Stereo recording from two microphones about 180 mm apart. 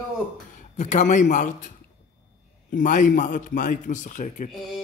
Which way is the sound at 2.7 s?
45° left (ahead or behind).